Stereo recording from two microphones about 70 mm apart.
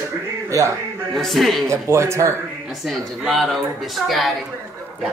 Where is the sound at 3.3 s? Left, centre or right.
Centre.